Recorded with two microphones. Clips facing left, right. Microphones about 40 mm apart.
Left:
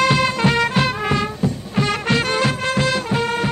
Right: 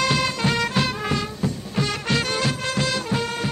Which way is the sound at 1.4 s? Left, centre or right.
Centre.